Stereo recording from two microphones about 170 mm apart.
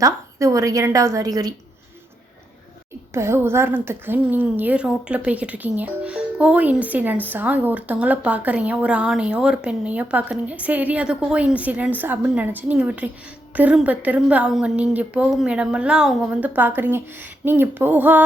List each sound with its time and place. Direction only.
0.0 s a woman's voice: 20° right (ahead or behind)
3.1 s a woman's voice: 15° right (ahead or behind)